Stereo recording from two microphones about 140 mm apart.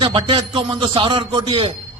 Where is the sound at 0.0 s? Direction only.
40° right (ahead or behind).